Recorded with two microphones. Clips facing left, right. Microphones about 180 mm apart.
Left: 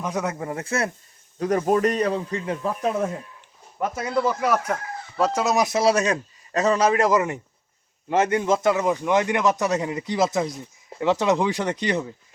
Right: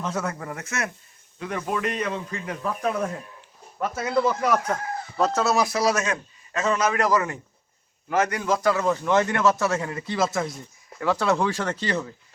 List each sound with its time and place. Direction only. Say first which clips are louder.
0.0 s speech: left 2 dB; 15° left (ahead or behind); by 0.9 s 30° left (ahead or behind)
1.4 s a man's voice: left 8 dB; 40° left (ahead or behind); by 3.1 s 25° left (ahead or behind)
3.9 s a man's voice: right 1 dB; 5° right (ahead or behind); by 12.1 s 15° left (ahead or behind)